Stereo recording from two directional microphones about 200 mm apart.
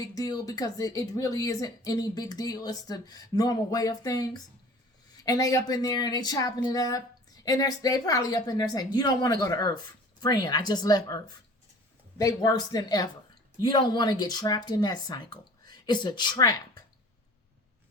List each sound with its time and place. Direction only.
0.0 s a woman's voice: 20° left (ahead or behind)